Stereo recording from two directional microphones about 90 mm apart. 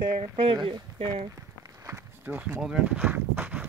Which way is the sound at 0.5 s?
55° right (ahead or behind).